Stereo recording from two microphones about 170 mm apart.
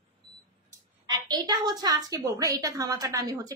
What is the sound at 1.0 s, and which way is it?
A woman's voice, 25° right (ahead or behind).